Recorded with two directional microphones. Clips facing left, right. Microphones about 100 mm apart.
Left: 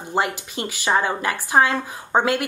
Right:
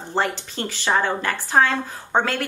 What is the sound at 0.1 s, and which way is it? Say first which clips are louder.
Speech: left 1 dB; 10° left (ahead or behind).